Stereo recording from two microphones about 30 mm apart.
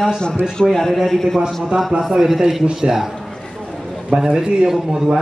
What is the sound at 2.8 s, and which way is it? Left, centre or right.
Speech, centre.